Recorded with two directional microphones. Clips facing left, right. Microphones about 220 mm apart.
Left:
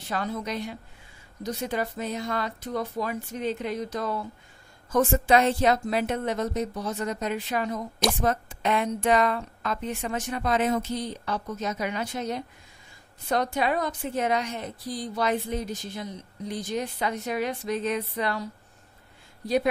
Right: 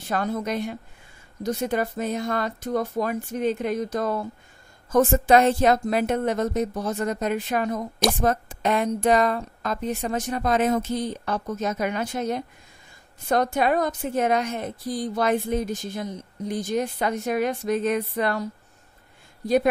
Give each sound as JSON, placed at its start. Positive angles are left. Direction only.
{"t": 0.1, "sound": "a woman's voice", "side_deg": -50}